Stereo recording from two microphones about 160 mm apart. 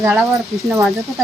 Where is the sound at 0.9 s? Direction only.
Centre (ahead or behind).